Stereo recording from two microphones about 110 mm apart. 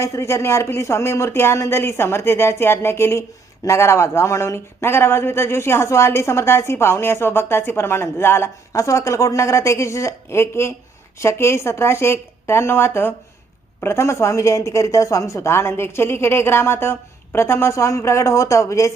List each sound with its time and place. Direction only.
0.0 s speech: 30° left (ahead or behind)